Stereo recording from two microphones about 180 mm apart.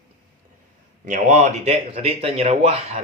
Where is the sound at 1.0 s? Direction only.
45° right (ahead or behind).